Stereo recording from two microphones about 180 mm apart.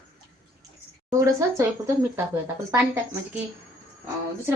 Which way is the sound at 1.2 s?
15° right (ahead or behind).